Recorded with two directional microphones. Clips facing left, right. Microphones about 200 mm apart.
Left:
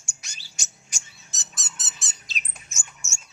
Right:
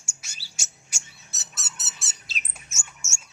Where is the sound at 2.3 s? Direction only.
5° right (ahead or behind).